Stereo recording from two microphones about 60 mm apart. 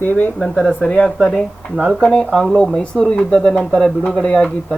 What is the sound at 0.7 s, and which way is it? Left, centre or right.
Speech, centre.